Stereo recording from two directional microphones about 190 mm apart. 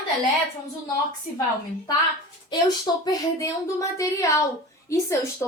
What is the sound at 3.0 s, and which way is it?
A woman's voice, 15° left (ahead or behind).